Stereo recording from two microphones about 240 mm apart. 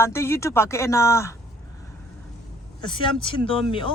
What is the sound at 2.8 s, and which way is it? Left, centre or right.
Speech, centre.